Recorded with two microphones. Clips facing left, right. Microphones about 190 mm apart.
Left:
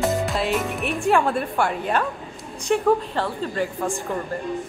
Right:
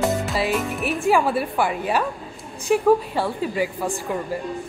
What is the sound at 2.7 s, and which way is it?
A woman's voice, 10° right (ahead or behind).